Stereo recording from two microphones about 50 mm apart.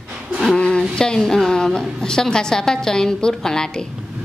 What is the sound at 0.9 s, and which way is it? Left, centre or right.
A man's voice, centre.